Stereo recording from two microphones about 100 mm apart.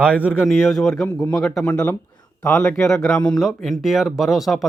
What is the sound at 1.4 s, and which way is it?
Speech, 5° left (ahead or behind).